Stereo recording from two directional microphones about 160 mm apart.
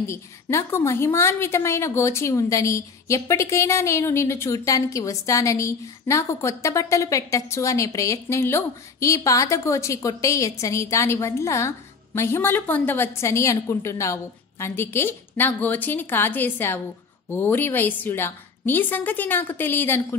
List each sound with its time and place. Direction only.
0.0 s a woman's voice: 15° left (ahead or behind)